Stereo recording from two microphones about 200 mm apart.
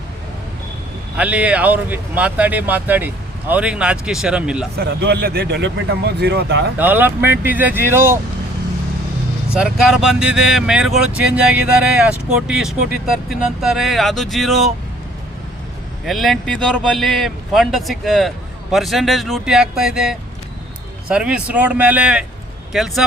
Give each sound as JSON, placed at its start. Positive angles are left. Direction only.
{"t": 1.1, "sound": "a man's voice", "side_deg": -5}
{"t": 4.8, "sound": "speech", "side_deg": -55}
{"t": 6.7, "sound": "speech", "side_deg": -10}
{"t": 9.6, "sound": "a man's voice", "side_deg": -5}
{"t": 16.0, "sound": "a man's voice", "side_deg": 0}